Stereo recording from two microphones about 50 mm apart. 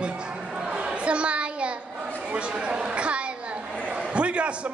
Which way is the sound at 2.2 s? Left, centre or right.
Right.